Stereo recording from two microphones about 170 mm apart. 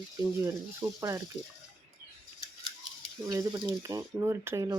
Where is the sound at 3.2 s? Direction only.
20° right (ahead or behind).